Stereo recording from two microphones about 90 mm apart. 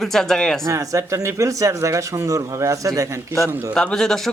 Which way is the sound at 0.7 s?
35° right (ahead or behind).